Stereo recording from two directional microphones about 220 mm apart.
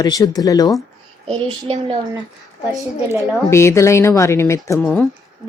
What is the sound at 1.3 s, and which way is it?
Speech, 25° right (ahead or behind).